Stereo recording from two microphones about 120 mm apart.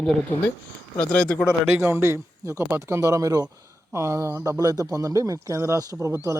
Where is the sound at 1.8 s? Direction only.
20° right (ahead or behind).